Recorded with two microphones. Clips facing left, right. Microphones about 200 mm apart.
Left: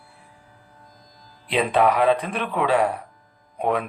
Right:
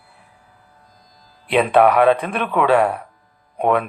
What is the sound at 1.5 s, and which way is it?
Speech, 65° right (ahead or behind).